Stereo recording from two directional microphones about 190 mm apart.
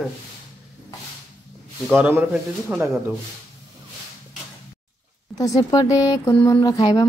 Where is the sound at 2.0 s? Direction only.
10° right (ahead or behind).